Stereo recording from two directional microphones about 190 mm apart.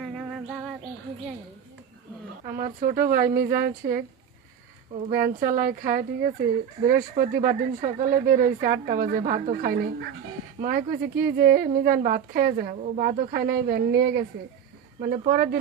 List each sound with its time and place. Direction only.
0.0 s music: centre (ahead or behind)
2.6 s a woman's voice: 50° right (ahead or behind)
5.1 s a woman's voice: 50° right (ahead or behind)
14.9 s a woman's voice: 40° right (ahead or behind)